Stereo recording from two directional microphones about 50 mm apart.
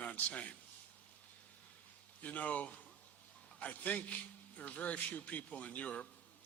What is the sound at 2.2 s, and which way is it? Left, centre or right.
Speech, left.